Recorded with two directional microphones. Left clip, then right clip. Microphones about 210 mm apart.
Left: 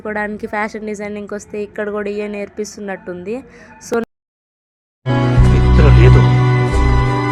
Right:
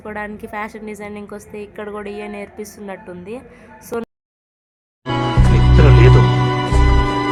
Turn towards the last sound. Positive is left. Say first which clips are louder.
# even
turn(degrees=0)  # may be behind; listen again after turning